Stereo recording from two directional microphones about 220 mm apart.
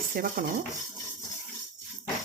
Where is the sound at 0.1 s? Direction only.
45° right (ahead or behind).